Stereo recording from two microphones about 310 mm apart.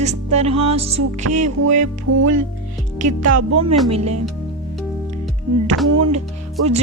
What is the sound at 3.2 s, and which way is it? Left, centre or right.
Speech, right.